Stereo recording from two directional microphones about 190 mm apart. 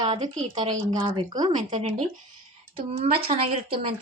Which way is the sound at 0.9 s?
25° right (ahead or behind).